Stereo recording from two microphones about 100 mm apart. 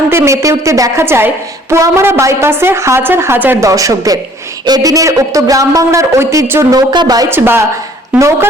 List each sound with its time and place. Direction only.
0.1 s a woman's voice: 30° right (ahead or behind)
3.6 s a man's voice: 35° right (ahead or behind)
6.7 s a man's voice: 45° right (ahead or behind)
7.3 s a woman's voice: 25° right (ahead or behind)